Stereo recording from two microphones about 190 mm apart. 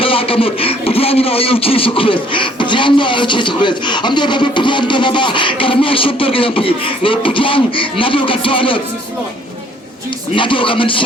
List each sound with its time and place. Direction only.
0.0 s speech: 30° left (ahead or behind)
10.3 s speech: 25° left (ahead or behind)